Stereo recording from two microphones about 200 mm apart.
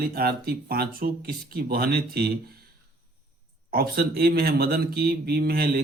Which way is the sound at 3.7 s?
50° right (ahead or behind).